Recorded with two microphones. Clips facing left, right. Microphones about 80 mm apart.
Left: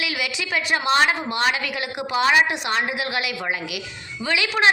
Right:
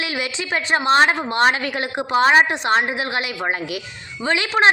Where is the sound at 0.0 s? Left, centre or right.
Right.